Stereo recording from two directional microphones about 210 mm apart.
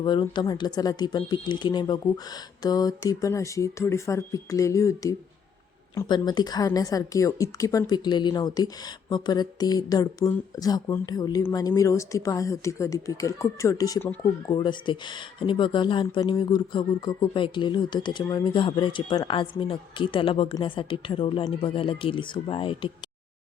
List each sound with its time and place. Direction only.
0.0 s a woman's voice: 20° left (ahead or behind)